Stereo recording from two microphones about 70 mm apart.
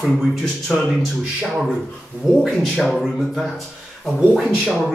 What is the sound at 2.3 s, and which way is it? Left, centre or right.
A man's voice, centre.